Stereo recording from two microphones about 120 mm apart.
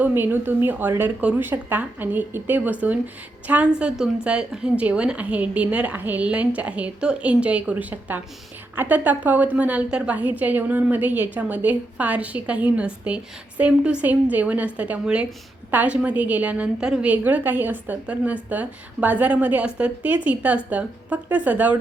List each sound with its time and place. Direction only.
0.0 s a woman's voice: 15° right (ahead or behind)